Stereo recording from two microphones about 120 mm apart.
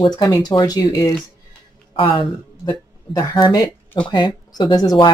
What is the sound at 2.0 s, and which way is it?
Speech, 45° left (ahead or behind).